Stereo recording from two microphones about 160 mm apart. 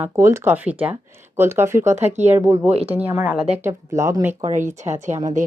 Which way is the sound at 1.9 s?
45° right (ahead or behind).